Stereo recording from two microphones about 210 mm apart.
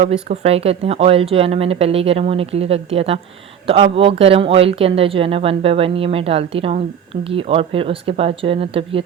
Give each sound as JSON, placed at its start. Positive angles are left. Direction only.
{"t": 0.0, "sound": "speech", "side_deg": -30}